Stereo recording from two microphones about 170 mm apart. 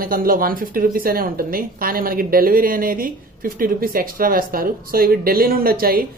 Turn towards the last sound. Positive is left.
turn(degrees=-60)  # may be behind; listen again after turning